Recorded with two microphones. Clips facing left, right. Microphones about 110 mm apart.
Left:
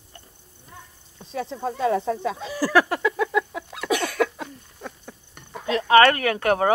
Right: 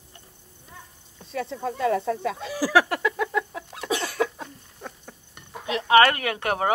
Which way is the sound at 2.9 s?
40° left (ahead or behind).